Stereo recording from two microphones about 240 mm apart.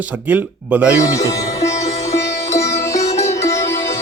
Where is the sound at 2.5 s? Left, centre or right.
Centre.